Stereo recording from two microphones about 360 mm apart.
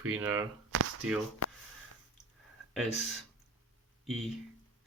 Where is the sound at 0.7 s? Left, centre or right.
Right.